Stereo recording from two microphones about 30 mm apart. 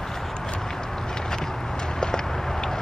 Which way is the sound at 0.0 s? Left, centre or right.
Centre.